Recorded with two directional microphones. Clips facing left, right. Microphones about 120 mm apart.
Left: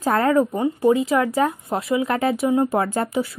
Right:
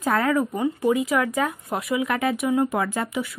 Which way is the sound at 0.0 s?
35° left (ahead or behind).